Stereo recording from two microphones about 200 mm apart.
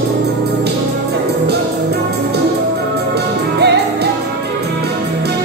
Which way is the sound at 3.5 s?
55° right (ahead or behind).